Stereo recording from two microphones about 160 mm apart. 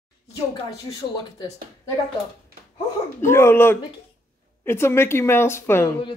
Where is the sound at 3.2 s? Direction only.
15° left (ahead or behind).